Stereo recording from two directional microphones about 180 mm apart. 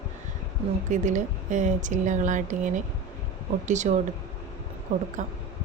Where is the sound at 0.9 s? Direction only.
45° right (ahead or behind).